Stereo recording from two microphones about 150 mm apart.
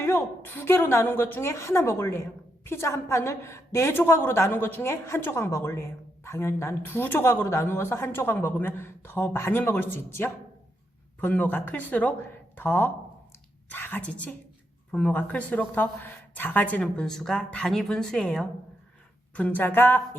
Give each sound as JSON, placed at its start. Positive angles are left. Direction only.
{"t": 0.0, "sound": "a woman's voice", "side_deg": 15}